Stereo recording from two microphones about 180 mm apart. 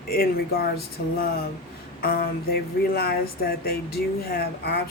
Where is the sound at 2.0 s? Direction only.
60° left (ahead or behind).